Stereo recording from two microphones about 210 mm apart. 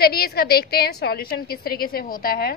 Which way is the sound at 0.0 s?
45° left (ahead or behind).